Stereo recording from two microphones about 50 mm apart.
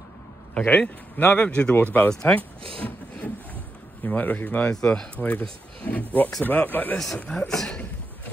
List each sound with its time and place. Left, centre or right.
0.6 s speech: left
1.8 s speech: left
2.3 s a sound: left
4.0 s speech: left
7.2 s speech: centre